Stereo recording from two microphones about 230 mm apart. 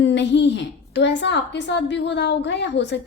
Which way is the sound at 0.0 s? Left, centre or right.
Left.